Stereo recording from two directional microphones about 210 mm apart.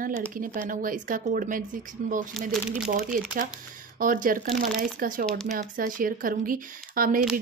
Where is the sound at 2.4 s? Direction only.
Centre (ahead or behind).